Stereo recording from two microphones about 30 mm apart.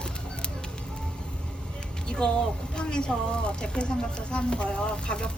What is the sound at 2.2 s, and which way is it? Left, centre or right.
Speech, left.